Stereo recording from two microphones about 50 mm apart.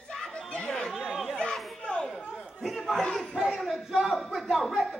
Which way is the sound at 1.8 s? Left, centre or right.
Centre.